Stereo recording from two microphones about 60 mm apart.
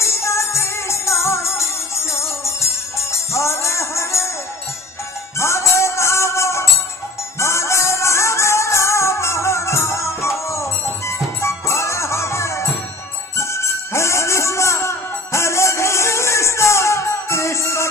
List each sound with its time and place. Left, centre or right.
0.0 s music: left
5.4 s music: left